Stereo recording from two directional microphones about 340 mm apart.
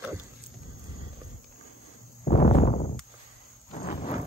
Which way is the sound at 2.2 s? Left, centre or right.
Left.